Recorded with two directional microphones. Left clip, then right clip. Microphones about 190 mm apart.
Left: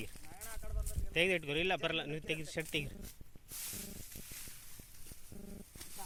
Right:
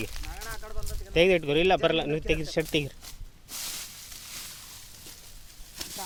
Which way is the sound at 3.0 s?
75° right (ahead or behind).